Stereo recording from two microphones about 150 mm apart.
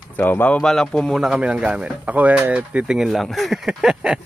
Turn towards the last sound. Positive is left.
turn(degrees=-5)  # may be behind; listen again after turning